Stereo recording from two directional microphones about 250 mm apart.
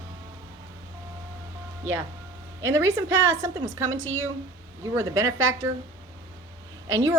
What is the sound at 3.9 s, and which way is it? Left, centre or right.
Speech, right.